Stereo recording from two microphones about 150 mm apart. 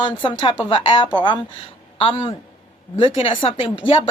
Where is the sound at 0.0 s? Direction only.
35° left (ahead or behind).